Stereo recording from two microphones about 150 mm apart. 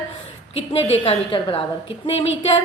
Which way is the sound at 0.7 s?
40° left (ahead or behind).